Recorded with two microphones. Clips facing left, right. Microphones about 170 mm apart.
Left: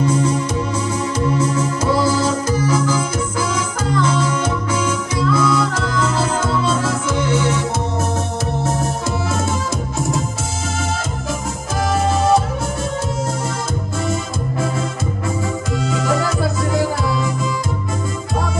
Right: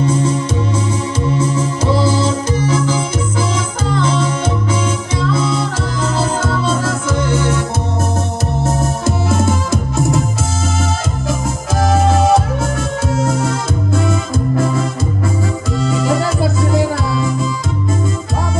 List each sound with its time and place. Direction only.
0.0 s music: 30° right (ahead or behind)
1.2 s organ: 25° right (ahead or behind)
3.9 s music: 30° right (ahead or behind)
7.1 s music: 50° right (ahead or behind)
8.6 s music: 50° right (ahead or behind)
11.8 s music: 85° right